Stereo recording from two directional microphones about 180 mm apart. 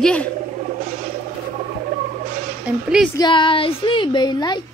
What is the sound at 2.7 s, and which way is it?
Speech, 5° right (ahead or behind).